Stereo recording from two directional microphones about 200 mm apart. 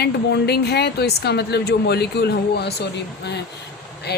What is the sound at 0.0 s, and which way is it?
A woman's voice, 55° left (ahead or behind).